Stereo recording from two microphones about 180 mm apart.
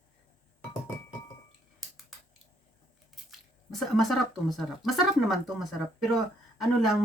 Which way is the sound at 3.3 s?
Centre (ahead or behind).